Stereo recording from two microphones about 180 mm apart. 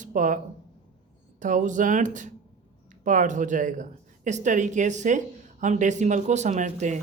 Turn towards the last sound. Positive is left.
turn(degrees=-45)  # may be behind; listen again after turning